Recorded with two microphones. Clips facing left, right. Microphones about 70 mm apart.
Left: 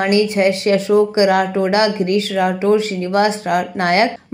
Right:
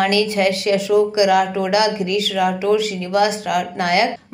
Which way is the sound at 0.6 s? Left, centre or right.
Left.